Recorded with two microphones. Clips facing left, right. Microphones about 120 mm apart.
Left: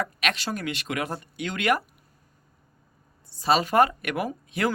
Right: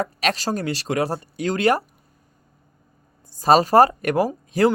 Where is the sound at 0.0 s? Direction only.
35° right (ahead or behind).